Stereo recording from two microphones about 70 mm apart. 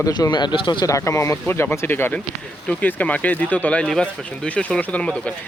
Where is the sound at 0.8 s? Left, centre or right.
Left.